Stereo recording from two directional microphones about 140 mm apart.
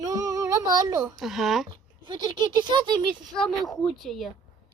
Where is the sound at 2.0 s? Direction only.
35° right (ahead or behind).